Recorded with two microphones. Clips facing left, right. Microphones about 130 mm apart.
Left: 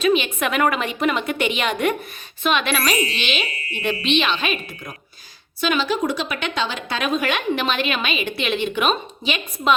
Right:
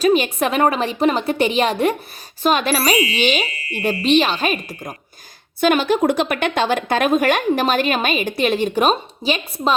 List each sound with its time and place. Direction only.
0.0 s a woman's voice: 40° right (ahead or behind)